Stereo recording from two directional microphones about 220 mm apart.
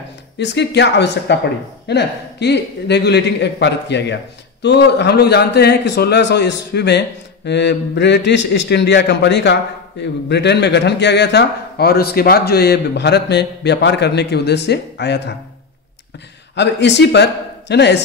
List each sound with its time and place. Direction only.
0.4 s a man's voice: 50° left (ahead or behind)
16.5 s a man's voice: 50° left (ahead or behind)